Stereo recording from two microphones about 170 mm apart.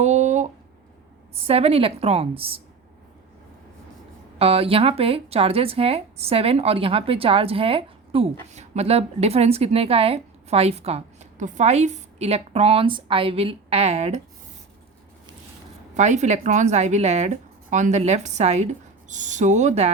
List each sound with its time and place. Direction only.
0.0 s a sound: 45° right (ahead or behind)
1.4 s speech: 35° right (ahead or behind)
4.4 s speech: 35° right (ahead or behind)
16.0 s speech: 45° right (ahead or behind)